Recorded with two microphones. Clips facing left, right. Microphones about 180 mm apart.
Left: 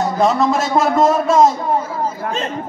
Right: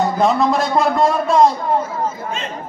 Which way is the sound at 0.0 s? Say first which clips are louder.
Even; centre (ahead or behind).